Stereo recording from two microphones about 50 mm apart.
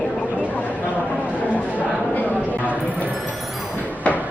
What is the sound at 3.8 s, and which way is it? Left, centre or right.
Music, left.